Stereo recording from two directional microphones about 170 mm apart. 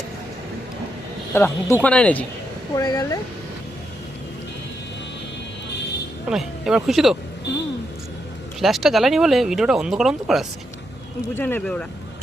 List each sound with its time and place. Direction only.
1.3 s speech: 15° left (ahead or behind)
2.7 s speech: 20° left (ahead or behind)
6.2 s speech: 5° right (ahead or behind)
8.6 s speech: centre (ahead or behind)
11.3 s speech: 10° left (ahead or behind)